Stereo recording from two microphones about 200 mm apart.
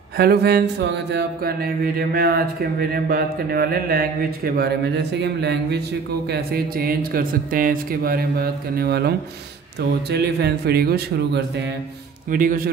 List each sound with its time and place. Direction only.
0.2 s a man's voice: 50° right (ahead or behind)
12.3 s speech: 45° right (ahead or behind)